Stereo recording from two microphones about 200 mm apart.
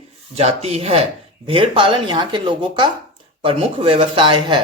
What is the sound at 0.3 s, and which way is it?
A man's voice, 30° right (ahead or behind).